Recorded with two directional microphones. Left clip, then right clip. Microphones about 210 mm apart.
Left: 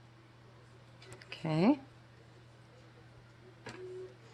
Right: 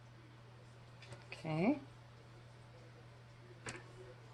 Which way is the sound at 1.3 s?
45° left (ahead or behind).